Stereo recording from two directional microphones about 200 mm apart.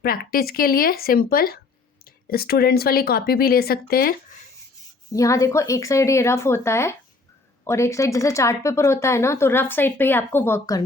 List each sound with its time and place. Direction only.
0.0 s speech: 50° left (ahead or behind)
5.1 s speech: 15° left (ahead or behind)